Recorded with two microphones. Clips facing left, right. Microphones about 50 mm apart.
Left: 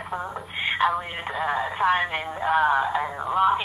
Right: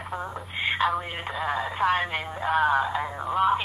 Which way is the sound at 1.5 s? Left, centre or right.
Centre.